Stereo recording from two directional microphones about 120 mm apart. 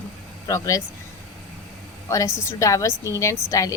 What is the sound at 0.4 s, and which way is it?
Speech, 30° left (ahead or behind).